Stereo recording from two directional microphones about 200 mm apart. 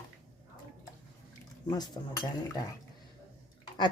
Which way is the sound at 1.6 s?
20° left (ahead or behind).